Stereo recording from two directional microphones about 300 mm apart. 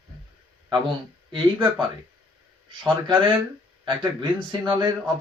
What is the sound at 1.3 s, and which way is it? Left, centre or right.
Speech, centre.